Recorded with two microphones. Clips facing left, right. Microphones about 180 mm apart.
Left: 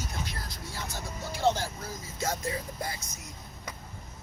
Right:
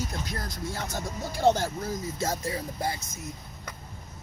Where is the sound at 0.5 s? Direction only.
50° right (ahead or behind).